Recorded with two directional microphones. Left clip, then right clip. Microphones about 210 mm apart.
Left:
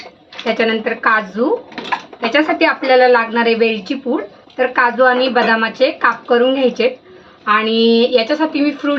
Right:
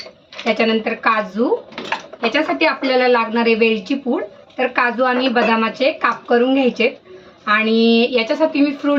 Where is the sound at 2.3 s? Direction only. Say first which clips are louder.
Left 4 dB; 5° left (ahead or behind).